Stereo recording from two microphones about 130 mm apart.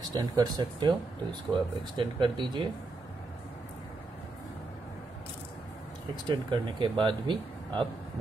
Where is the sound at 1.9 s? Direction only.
40° right (ahead or behind).